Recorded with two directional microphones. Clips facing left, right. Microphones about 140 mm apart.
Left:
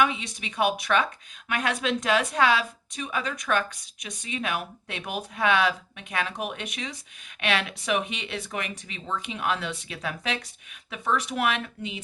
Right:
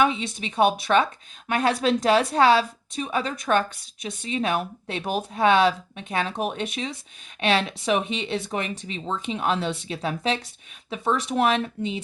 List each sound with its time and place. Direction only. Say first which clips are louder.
0.0 s a woman's voice: right 3 dB; 30° right (ahead or behind)